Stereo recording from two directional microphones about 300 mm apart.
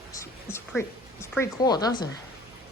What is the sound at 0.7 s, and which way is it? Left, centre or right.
Speech, centre.